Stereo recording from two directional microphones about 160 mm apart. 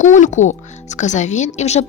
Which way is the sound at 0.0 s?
50° left (ahead or behind).